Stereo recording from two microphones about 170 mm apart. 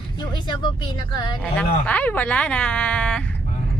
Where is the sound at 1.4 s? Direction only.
5° left (ahead or behind).